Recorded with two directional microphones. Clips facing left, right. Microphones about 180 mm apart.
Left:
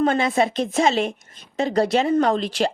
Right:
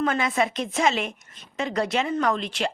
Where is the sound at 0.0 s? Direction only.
30° left (ahead or behind).